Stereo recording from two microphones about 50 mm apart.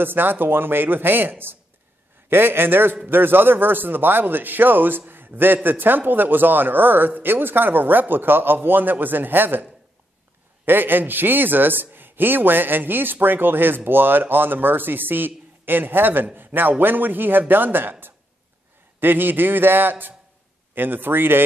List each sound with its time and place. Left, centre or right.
0.0 s a man's voice: right
18.9 s a man's voice: right